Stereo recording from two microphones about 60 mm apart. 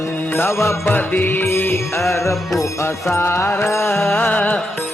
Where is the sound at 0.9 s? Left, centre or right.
Left.